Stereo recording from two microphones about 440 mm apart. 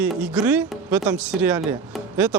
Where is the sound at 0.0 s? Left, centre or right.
Centre.